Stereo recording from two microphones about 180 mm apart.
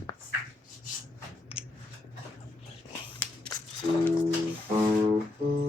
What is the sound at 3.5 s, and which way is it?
Music, 20° left (ahead or behind).